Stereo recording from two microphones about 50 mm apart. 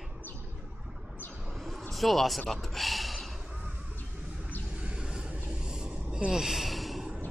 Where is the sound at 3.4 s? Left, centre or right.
Centre.